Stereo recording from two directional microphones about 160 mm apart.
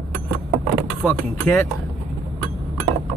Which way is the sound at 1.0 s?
10° left (ahead or behind).